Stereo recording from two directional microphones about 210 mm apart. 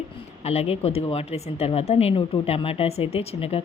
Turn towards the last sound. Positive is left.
turn(degrees=30)  # may be behind; listen again after turning